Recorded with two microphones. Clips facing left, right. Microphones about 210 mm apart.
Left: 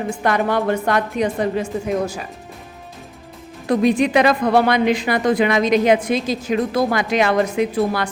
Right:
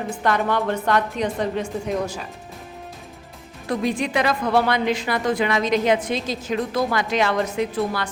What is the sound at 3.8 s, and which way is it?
A woman's voice, 15° left (ahead or behind).